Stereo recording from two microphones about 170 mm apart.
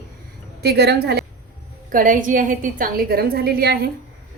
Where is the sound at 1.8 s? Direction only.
50° right (ahead or behind).